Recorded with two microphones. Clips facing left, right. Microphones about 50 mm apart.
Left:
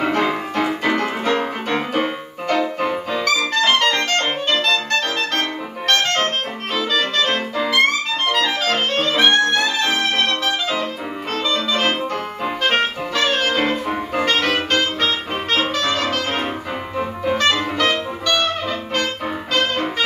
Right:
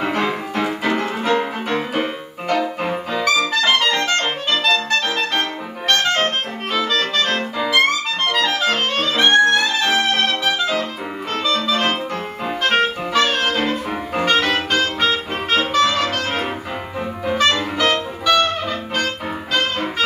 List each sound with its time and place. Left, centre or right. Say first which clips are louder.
0.0 s music: left 2 dB; centre
6.1 s music: right 1 dB; centre
14.1 s music: right 2 dB; centre